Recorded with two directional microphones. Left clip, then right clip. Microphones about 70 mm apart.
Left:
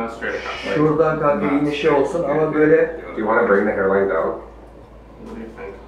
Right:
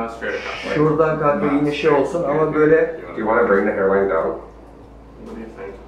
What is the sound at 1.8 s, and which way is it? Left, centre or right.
Speech, centre.